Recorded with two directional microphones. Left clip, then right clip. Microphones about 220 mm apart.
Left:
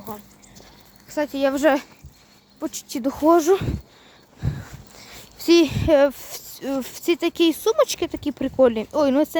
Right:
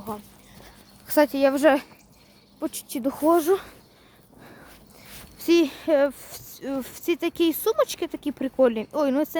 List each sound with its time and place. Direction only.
1.0 s speech: 45° right (ahead or behind)
1.3 s speech: 5° right (ahead or behind); by 3.7 s 10° left (ahead or behind)
4.4 s dog: 10° left (ahead or behind)
4.9 s speech: 10° left (ahead or behind)